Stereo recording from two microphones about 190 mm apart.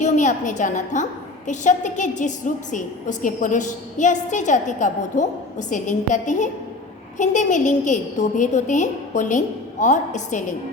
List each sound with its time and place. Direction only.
0.0 s a woman's voice: 40° left (ahead or behind)